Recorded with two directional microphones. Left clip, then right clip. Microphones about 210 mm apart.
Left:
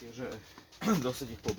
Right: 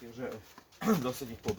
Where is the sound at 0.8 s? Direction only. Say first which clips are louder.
Even; 20° right (ahead or behind).